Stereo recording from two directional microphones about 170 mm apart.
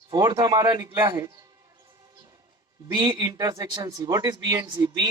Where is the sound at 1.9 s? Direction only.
20° right (ahead or behind).